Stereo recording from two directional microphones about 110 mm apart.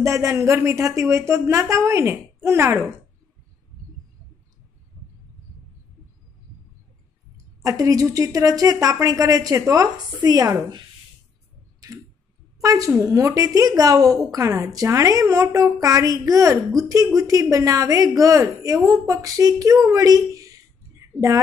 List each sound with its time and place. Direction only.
0.0 s speech: 25° right (ahead or behind)
7.6 s a woman's voice: 30° right (ahead or behind)
12.6 s a woman's voice: 30° right (ahead or behind)